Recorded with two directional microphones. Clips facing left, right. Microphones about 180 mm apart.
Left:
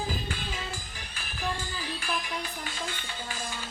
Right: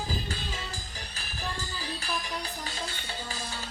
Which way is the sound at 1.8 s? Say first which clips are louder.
Left 1 dB; 40° right (ahead or behind).